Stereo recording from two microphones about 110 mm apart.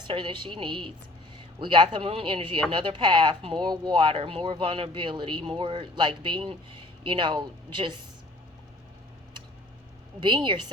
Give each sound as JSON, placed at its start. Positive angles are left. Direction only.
{"t": 0.1, "sound": "speech", "side_deg": -50}
{"t": 10.2, "sound": "speech", "side_deg": -45}